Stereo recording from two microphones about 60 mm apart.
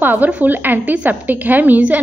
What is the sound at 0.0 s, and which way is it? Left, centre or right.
A woman's voice, right.